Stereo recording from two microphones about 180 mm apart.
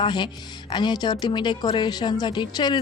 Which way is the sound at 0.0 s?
25° left (ahead or behind).